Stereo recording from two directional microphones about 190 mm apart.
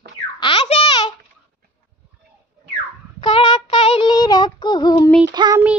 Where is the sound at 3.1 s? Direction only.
25° left (ahead or behind).